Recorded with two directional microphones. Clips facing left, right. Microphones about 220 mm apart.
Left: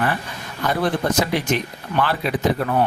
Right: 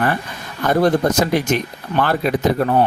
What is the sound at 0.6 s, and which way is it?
Speech, 45° right (ahead or behind).